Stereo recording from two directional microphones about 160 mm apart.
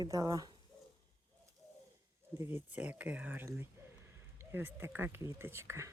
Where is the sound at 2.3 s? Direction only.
10° right (ahead or behind).